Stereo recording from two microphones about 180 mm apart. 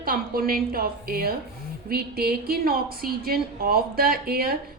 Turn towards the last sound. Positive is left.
turn(degrees=-60)  # may be behind; listen again after turning